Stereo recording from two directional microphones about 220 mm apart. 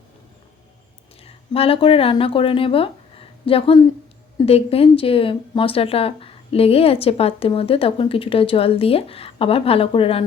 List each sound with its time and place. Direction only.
1.2 s speech: 25° left (ahead or behind)